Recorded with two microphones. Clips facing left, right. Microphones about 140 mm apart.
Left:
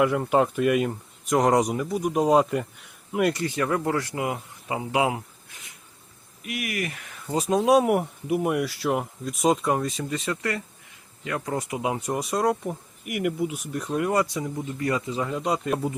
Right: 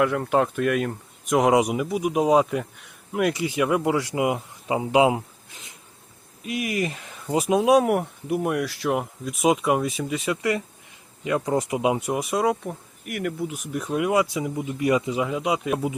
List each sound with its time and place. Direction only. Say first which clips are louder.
0.0 s speech: even; 5° left (ahead or behind); by 7.3 s 25° right (ahead or behind)
7.3 s speech: right 1 dB; 10° right (ahead or behind)